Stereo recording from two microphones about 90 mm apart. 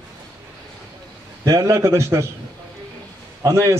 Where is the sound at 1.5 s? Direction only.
40° right (ahead or behind).